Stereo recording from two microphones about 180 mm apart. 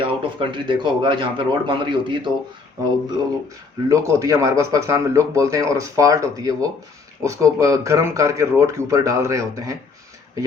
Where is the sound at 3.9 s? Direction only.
20° right (ahead or behind).